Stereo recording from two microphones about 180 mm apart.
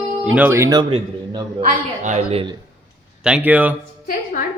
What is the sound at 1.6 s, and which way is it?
Speech, 40° right (ahead or behind).